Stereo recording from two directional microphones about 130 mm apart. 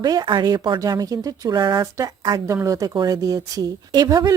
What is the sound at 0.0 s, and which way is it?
A woman's voice, 35° right (ahead or behind).